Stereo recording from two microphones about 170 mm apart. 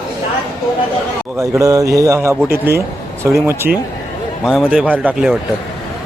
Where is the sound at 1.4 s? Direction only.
20° right (ahead or behind).